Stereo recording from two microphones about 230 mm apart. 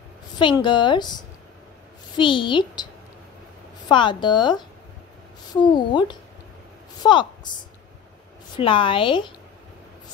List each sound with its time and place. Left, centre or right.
0.4 s a woman's voice: left
3.9 s a woman's voice: centre
8.5 s a woman's voice: left